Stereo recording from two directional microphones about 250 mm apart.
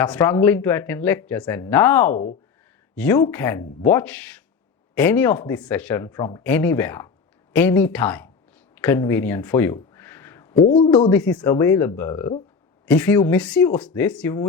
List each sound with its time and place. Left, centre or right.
0.0 s speech: centre
8.7 s a sound: centre
10.7 s a man's voice: left
10.9 s speech: centre